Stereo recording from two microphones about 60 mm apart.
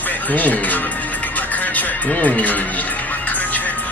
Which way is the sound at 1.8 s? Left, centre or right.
Left.